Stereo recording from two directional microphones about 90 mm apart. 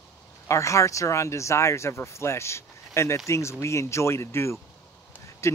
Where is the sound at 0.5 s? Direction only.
35° left (ahead or behind).